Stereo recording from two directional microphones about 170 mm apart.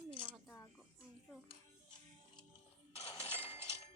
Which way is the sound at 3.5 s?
35° left (ahead or behind).